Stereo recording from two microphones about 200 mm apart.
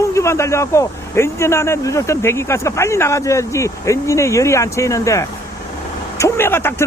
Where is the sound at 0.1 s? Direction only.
15° left (ahead or behind).